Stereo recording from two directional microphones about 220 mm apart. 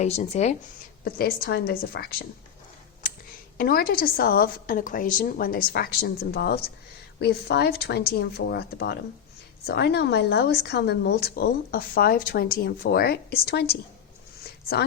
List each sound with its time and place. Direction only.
0.0 s speech: 30° left (ahead or behind)
1.0 s speech: 45° left (ahead or behind)
3.6 s speech: 45° left (ahead or behind)